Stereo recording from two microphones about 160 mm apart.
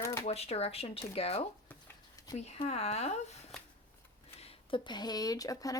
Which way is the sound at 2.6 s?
40° left (ahead or behind).